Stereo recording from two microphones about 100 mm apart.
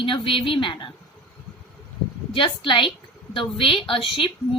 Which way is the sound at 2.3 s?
55° left (ahead or behind).